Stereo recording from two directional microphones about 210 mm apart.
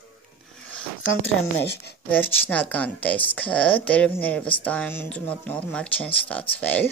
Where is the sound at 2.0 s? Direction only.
5° left (ahead or behind).